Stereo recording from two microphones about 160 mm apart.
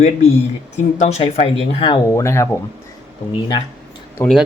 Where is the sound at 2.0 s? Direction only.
20° left (ahead or behind).